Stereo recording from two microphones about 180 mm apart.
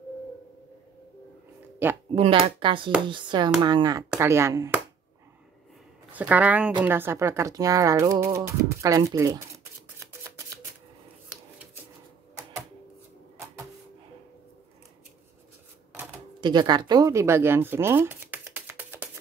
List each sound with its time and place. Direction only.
1.8 s speech: 10° right (ahead or behind)
2.1 s speech: 30° right (ahead or behind)
6.1 s speech: 10° right (ahead or behind)
9.9 s a sound: 15° right (ahead or behind)
16.3 s speech: 25° right (ahead or behind)